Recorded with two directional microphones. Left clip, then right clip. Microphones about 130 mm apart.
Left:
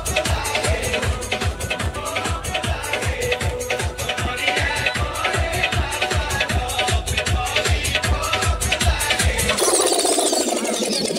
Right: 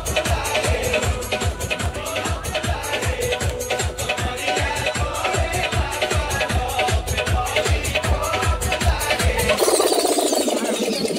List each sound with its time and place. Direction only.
0.1 s music: 45° left (ahead or behind)
5.9 s music: 40° left (ahead or behind)
8.3 s music: 40° left (ahead or behind)